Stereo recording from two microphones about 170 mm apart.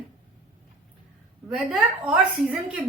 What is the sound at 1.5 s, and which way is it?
A woman's voice, 5° right (ahead or behind).